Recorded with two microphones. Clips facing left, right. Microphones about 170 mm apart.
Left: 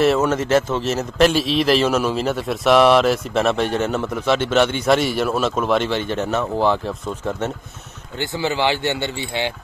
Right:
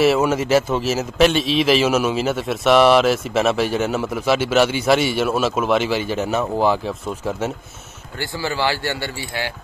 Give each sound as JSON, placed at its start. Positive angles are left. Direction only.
{"t": 0.0, "sound": "a man's voice", "side_deg": -5}
{"t": 8.2, "sound": "speech", "side_deg": 20}